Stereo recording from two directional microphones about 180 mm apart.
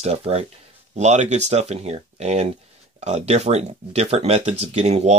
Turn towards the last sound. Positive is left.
turn(degrees=-40)  # may be behind; listen again after turning